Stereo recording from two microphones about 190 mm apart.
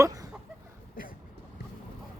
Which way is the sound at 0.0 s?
20° right (ahead or behind).